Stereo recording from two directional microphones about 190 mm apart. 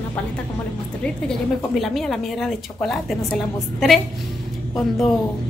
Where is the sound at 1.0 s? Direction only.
5° left (ahead or behind).